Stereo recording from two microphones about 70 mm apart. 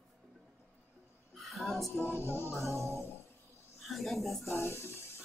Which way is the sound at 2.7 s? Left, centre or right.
Right.